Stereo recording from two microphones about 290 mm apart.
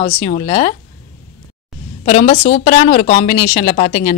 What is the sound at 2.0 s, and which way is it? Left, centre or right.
A woman's voice, left.